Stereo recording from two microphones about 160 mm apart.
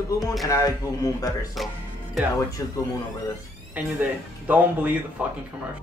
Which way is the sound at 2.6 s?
20° left (ahead or behind).